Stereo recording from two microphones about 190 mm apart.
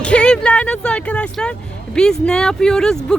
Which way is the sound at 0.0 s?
5° left (ahead or behind).